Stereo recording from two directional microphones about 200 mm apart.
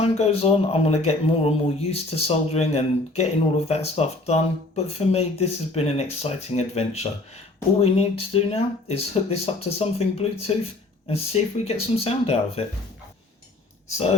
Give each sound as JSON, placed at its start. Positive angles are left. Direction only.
{"t": 0.0, "sound": "speech", "side_deg": 30}